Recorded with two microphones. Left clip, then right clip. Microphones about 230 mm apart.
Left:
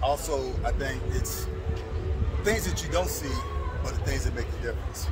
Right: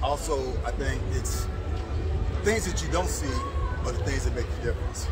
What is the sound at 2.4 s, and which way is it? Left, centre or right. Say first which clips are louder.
Speech: right 1 dB; left.